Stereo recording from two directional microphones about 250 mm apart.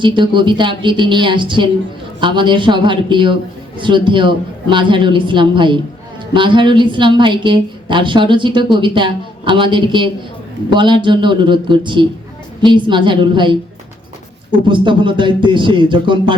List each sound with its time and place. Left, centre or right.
0.0 s a woman's voice: centre
14.7 s a woman's voice: centre